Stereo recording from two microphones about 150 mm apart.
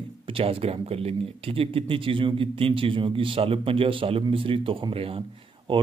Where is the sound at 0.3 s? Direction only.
40° right (ahead or behind).